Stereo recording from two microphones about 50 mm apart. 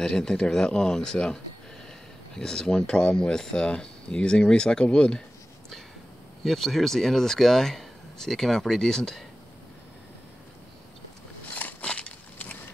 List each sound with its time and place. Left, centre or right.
0.0 s speech: centre
6.4 s speech: centre
11.5 s a sound: left